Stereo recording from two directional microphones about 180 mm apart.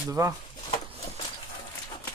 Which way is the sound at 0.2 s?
20° right (ahead or behind).